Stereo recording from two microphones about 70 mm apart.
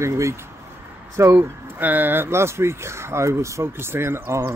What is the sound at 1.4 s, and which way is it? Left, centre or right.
Speech, right.